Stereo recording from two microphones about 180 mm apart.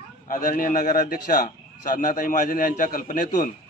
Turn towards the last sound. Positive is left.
turn(degrees=45)  # may be behind; listen again after turning